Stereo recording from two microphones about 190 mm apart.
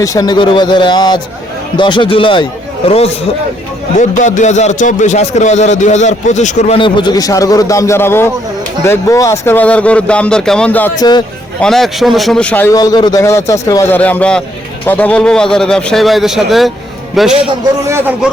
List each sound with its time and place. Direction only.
0.0 s a man's voice: 20° left (ahead or behind)
4.2 s a man's voice: 40° left (ahead or behind); by 17.3 s centre (ahead or behind)
17.8 s a man's voice: 15° right (ahead or behind)